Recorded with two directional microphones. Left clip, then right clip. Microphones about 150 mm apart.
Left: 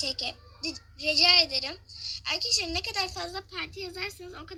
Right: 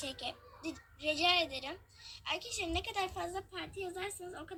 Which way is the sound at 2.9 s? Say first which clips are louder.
Left 5 dB; 30° left (ahead or behind).